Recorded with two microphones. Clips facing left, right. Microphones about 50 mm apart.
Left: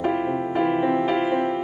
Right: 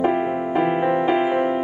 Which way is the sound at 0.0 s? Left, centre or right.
Centre.